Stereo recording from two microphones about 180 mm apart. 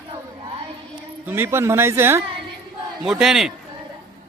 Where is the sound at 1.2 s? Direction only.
10° right (ahead or behind).